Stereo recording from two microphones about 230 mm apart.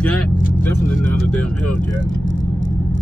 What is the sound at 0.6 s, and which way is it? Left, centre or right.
Speech, centre.